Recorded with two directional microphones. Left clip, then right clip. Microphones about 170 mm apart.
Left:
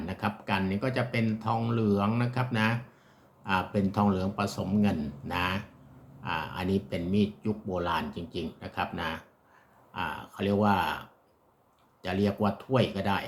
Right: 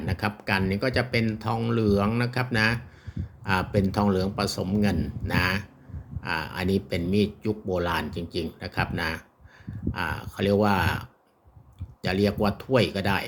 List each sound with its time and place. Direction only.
0.0 s speech: 45° right (ahead or behind)
12.0 s speech: 45° right (ahead or behind)